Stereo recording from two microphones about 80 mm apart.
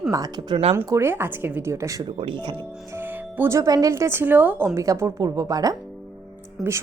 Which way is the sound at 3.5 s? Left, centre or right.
Right.